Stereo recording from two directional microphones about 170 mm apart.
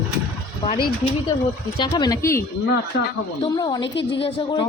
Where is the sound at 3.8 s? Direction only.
90° left.